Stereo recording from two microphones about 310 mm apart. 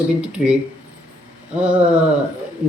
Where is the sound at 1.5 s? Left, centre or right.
Centre.